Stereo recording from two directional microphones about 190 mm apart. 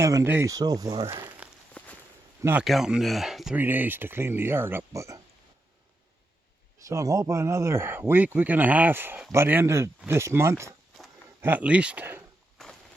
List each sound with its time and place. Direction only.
0.0 s speech: 15° right (ahead or behind)
1.8 s a sound: 5° left (ahead or behind)
2.4 s speech: 10° right (ahead or behind)
6.8 s speech: 15° right (ahead or behind)
10.7 s a sound: centre (ahead or behind)
11.3 s speech: 10° right (ahead or behind)